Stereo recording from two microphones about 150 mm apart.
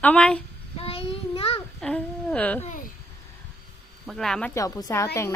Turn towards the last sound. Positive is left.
turn(degrees=20)  # may be behind; listen again after turning